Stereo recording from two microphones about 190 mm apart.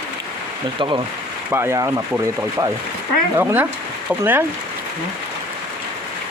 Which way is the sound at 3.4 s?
10° right (ahead or behind).